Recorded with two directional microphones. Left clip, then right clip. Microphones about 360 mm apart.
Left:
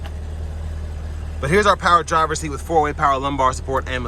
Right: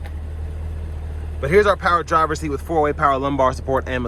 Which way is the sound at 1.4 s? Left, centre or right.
Centre.